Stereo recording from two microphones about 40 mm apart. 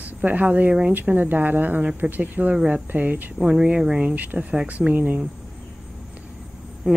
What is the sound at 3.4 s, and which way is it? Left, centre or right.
Speech, right.